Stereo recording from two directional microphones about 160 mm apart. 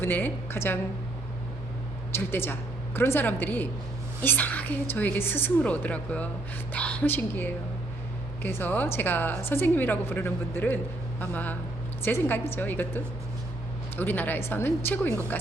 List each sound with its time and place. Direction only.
0.0 s a woman's voice: 15° left (ahead or behind)
2.1 s a woman's voice: 15° left (ahead or behind)